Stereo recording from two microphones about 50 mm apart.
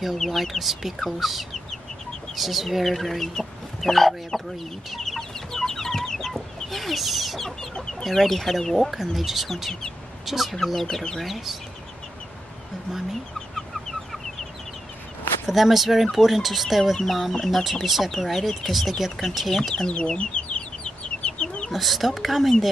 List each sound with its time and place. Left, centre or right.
0.0 s speech: centre
4.9 s chicken: centre
8.0 s speech: centre
13.6 s chicken: centre
15.4 s speech: centre
19.7 s chicken: centre
21.7 s speech: centre